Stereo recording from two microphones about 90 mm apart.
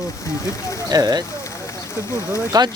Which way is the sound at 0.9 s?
45° right (ahead or behind).